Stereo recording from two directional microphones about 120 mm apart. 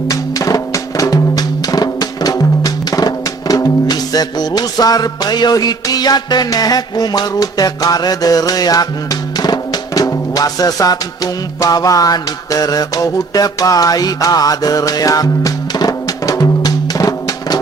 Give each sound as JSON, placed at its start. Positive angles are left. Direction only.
{"t": 0.1, "sound": "drum", "side_deg": 30}